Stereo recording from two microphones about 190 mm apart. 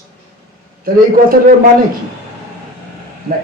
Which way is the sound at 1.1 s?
50° right (ahead or behind).